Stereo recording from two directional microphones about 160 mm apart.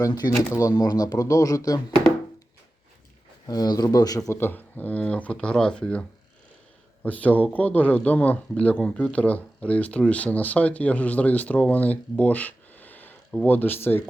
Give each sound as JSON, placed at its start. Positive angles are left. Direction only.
{"t": 0.0, "sound": "speech", "side_deg": 25}
{"t": 3.4, "sound": "speech", "side_deg": 25}